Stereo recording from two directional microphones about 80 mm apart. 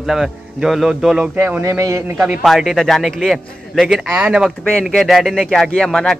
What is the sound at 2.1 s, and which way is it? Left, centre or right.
A man's voice, centre.